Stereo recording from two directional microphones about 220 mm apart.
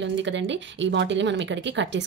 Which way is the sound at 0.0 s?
55° right (ahead or behind).